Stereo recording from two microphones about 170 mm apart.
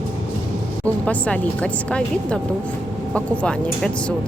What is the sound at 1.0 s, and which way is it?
A woman's voice, 5° left (ahead or behind).